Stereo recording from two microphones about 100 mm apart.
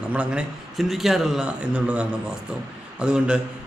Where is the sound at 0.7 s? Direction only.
Centre (ahead or behind).